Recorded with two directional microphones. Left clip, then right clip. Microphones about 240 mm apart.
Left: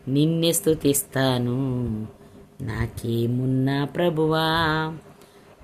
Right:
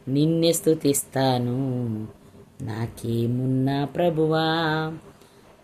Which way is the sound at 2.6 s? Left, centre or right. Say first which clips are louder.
Left 1 dB; centre.